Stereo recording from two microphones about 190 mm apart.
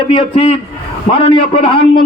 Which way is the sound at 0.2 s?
30° left (ahead or behind).